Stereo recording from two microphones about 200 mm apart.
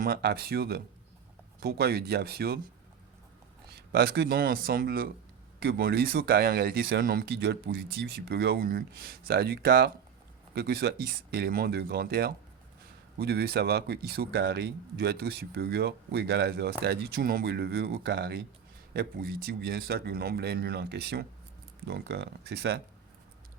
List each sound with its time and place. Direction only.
0.0 s speech: 50° right (ahead or behind)
3.8 s speech: 55° right (ahead or behind)